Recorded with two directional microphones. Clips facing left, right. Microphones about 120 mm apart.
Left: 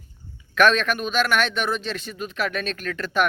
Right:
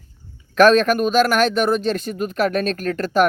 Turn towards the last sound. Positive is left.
turn(degrees=-40)  # may be behind; listen again after turning